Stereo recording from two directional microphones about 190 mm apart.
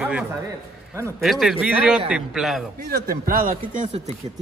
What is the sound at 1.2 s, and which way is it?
A man's voice, centre (ahead or behind).